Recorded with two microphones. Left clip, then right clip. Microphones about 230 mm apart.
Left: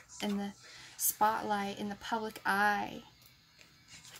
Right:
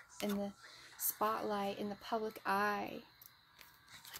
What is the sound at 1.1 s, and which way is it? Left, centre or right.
A woman's voice, centre.